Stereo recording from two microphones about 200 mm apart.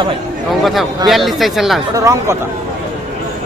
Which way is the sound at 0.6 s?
Centre (ahead or behind).